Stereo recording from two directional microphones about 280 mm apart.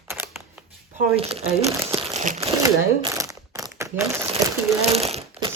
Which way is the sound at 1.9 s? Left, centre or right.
Right.